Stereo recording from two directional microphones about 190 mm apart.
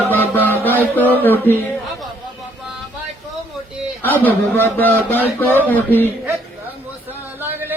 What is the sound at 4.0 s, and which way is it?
Speech, 10° left (ahead or behind).